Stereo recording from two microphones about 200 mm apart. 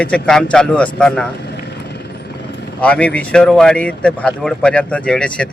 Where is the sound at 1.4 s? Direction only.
55° left (ahead or behind).